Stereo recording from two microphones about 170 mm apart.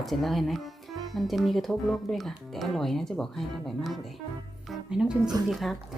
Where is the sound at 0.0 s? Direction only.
Centre (ahead or behind).